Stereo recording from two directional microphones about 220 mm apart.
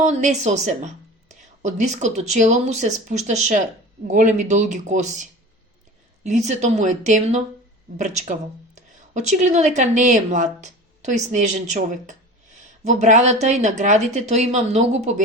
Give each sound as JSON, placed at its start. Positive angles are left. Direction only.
{"t": 0.0, "sound": "a woman's voice", "side_deg": -30}